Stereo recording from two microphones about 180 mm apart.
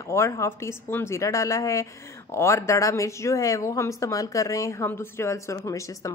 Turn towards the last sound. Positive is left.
turn(degrees=15)  # may be behind; listen again after turning